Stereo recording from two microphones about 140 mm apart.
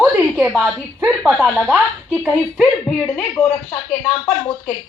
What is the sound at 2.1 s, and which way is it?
Speech, 10° left (ahead or behind).